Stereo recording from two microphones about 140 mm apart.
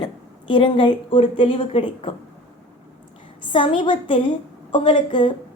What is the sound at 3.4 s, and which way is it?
A woman's voice, 35° left (ahead or behind).